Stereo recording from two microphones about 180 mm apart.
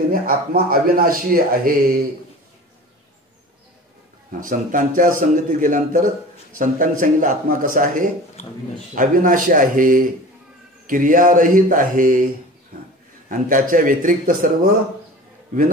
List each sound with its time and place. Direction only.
0.1 s a man's voice: 55° right (ahead or behind)
4.4 s a man's voice: 50° right (ahead or behind)
13.3 s a man's voice: 50° right (ahead or behind)